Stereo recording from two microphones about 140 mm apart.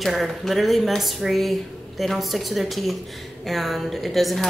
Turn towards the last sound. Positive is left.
turn(degrees=0)  # may be behind; listen again after turning